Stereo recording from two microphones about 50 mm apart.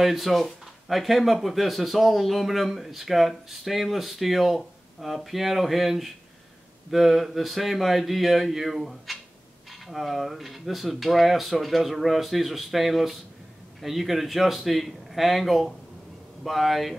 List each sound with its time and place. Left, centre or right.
0.0 s speech: centre